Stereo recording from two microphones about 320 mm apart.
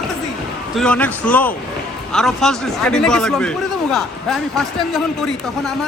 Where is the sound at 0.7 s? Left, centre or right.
Centre.